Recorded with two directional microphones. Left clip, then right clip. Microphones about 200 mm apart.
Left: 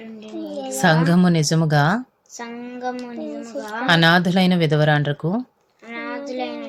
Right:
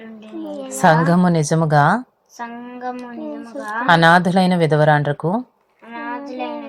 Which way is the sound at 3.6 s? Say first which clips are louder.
Right 4 dB; 5° left (ahead or behind).